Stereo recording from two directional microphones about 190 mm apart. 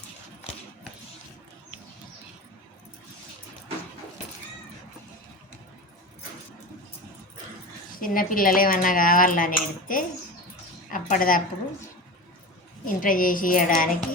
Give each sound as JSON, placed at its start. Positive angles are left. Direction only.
{"t": 7.9, "sound": "speech", "side_deg": 45}
{"t": 12.8, "sound": "speech", "side_deg": 45}